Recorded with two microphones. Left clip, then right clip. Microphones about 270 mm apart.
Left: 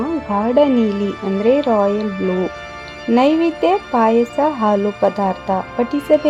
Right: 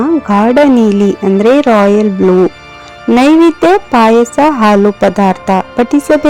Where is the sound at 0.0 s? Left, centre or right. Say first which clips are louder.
Right 9 dB; right.